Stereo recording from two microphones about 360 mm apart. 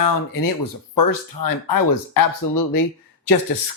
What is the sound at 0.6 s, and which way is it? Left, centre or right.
Speech, left.